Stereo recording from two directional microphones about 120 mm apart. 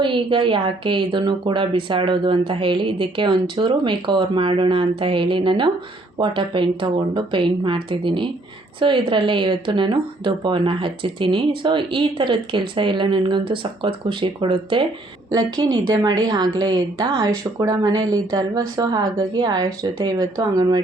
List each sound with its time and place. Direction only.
0.0 s speech: 45° right (ahead or behind)